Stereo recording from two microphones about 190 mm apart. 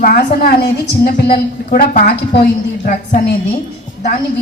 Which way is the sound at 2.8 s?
45° left (ahead or behind).